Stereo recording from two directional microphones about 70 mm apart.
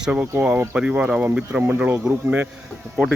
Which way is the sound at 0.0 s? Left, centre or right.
Centre.